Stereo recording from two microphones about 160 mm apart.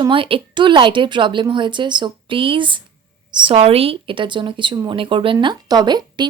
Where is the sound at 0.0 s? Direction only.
35° right (ahead or behind).